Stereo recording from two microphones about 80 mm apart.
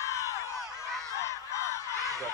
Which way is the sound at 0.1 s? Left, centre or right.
Left.